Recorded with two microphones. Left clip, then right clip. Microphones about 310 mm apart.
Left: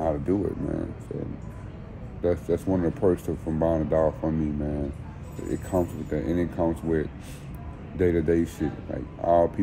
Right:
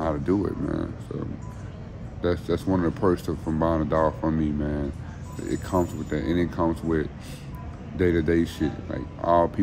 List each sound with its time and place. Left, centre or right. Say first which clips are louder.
0.0 s speech: even; centre
2.2 s speech: even; centre